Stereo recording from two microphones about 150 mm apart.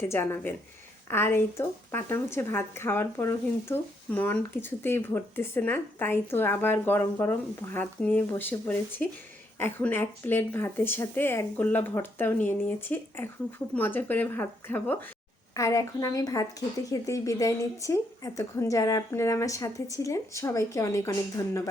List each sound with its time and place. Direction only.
0.0 s speech: 15° left (ahead or behind)